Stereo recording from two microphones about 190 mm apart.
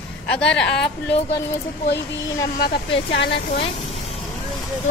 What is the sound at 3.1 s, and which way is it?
Speech, 70° left (ahead or behind).